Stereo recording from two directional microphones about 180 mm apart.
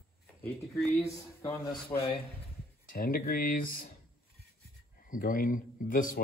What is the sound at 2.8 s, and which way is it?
Speech, 55° left (ahead or behind).